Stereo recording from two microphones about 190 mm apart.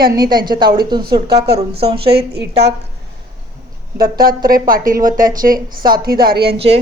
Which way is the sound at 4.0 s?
50° right (ahead or behind).